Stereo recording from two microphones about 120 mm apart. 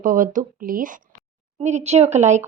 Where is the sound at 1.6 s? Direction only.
70° right (ahead or behind).